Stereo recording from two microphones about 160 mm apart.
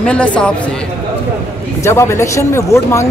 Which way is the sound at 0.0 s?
5° left (ahead or behind).